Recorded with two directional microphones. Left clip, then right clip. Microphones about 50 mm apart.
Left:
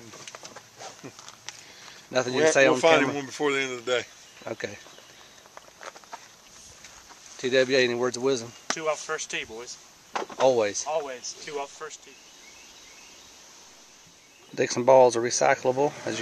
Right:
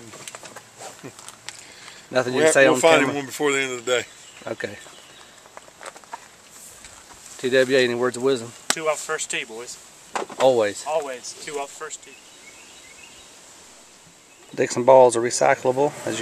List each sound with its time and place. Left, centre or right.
0.1 s a sound: centre
1.4 s speech: centre
5.5 s walk: centre
7.3 s speech: left
8.2 s speech: left
8.7 s speech: centre
10.4 s speech: left
10.9 s speech: centre
14.5 s speech: left